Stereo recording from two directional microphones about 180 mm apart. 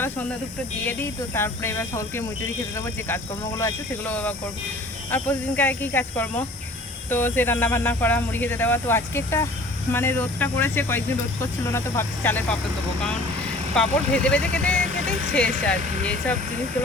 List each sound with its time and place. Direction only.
0.9 s speech: 15° left (ahead or behind)
13.7 s speech: 5° left (ahead or behind)